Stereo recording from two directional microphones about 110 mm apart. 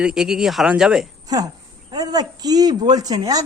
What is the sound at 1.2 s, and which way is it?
A woman's voice, 35° right (ahead or behind).